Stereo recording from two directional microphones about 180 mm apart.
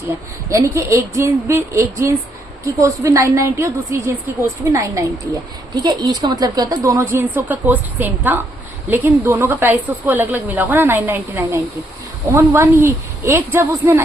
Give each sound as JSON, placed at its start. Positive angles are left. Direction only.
{"t": 0.5, "sound": "a woman's voice", "side_deg": -15}